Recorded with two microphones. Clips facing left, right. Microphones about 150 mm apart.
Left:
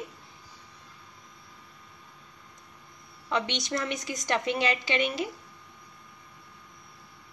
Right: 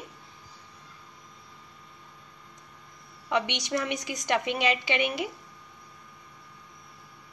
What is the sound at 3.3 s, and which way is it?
A woman's voice, 15° right (ahead or behind).